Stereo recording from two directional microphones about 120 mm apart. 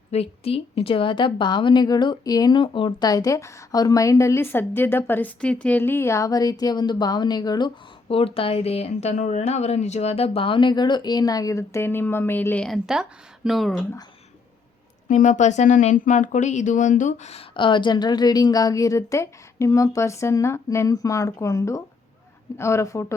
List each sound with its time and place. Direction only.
0.1 s a woman's voice: 55° left (ahead or behind)
3.1 s a woman's voice: 30° left (ahead or behind)
8.0 s speech: 50° left (ahead or behind); by 12.6 s 15° left (ahead or behind)
12.6 s speech: centre (ahead or behind)
15.1 s speech: 90° left
17.5 s a woman's voice: 45° left (ahead or behind); by 23.1 s 25° left (ahead or behind)